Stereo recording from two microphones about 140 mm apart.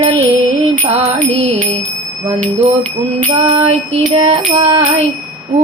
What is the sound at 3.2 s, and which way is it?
Music, 55° right (ahead or behind).